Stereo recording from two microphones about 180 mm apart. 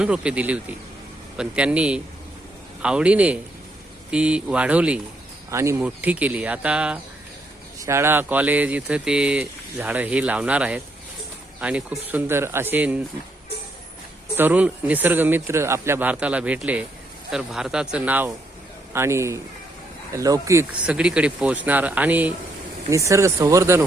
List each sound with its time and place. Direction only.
0.0 s speech: 5° right (ahead or behind)
14.3 s speech: 10° right (ahead or behind)
20.8 s speech: 5° right (ahead or behind)